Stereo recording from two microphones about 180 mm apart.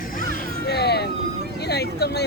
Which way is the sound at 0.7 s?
65° left (ahead or behind).